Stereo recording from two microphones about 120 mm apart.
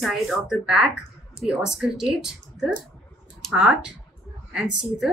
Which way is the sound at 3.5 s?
5° right (ahead or behind).